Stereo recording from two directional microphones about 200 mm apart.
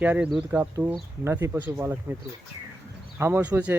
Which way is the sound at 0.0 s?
5° right (ahead or behind).